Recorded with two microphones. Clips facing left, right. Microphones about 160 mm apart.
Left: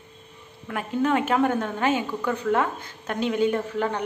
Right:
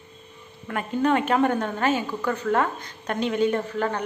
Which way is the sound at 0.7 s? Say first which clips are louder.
Right 1 dB; 5° left (ahead or behind).